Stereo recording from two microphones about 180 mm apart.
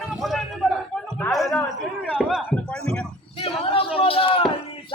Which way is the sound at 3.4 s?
30° left (ahead or behind).